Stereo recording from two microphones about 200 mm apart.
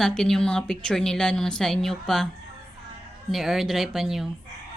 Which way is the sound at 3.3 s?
Centre (ahead or behind).